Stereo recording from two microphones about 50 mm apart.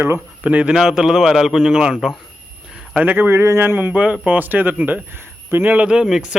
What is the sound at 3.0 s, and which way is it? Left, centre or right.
Speech, right.